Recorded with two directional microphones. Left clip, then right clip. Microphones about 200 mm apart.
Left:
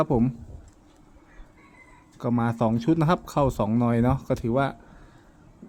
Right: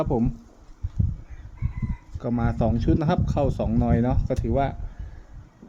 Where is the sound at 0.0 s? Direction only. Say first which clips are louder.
Left 1 dB; 20° left (ahead or behind).